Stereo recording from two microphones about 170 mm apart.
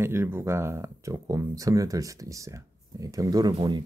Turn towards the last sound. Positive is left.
turn(degrees=-25)  # may be behind; listen again after turning